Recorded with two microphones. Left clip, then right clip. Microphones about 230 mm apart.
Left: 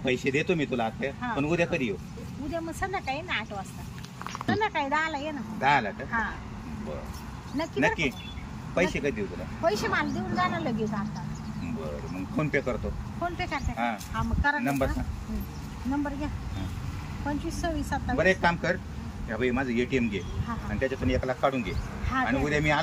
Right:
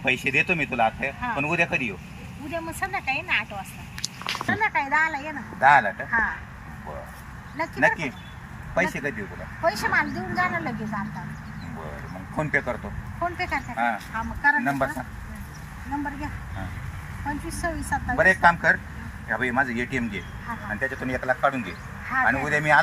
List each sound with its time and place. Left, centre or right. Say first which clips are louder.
0.0 s speech: right 5 dB; centre
2.5 s speech: right 3 dB; centre
4.5 s speech: right 3 dB; centre
7.5 s speech: right 4 dB; centre
12.4 s speech: right 3 dB; centre
17.5 s speech: right 5 dB; centre